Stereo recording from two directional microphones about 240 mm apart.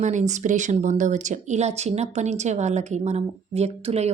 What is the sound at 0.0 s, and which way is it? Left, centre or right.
Speech, right.